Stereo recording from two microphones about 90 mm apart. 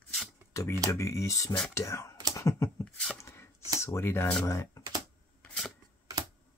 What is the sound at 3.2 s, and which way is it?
Chopping, 30° left (ahead or behind).